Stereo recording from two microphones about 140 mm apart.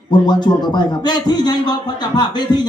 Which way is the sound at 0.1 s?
30° left (ahead or behind).